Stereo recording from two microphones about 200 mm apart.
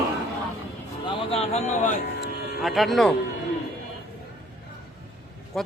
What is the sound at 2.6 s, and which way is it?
Speech, centre (ahead or behind).